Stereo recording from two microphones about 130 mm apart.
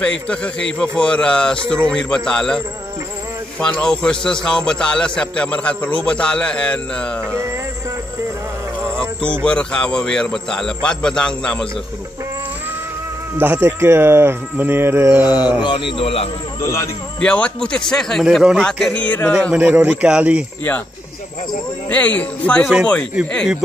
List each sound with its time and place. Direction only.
0.0 s a man's voice: 10° left (ahead or behind)
9.4 s a man's voice: 5° left (ahead or behind)
13.4 s speech: 15° right (ahead or behind)
15.2 s mantra: 35° left (ahead or behind)
15.6 s a man's voice: 40° left (ahead or behind)
16.6 s a man's voice: 20° left (ahead or behind)
17.2 s a man's voice: 10° left (ahead or behind)
19.0 s a man's voice: 10° left (ahead or behind)
19.5 s speech: 10° right (ahead or behind)
21.8 s a man's voice: 10° left (ahead or behind)